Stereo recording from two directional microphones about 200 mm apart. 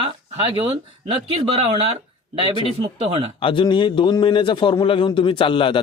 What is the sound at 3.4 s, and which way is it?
A man's voice, 25° left (ahead or behind).